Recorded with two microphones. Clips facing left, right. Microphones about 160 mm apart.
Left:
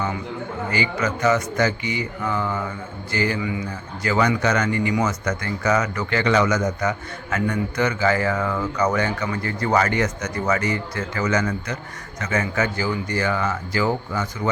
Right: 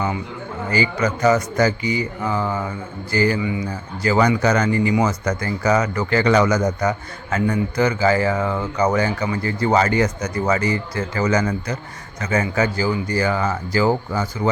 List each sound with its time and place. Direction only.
0.7 s speech: 35° right (ahead or behind)